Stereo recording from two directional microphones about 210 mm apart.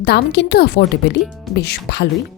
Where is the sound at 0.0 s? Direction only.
55° left (ahead or behind).